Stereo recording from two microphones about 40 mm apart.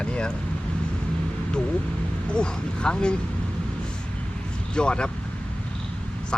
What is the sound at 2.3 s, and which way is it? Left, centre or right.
Speech, left.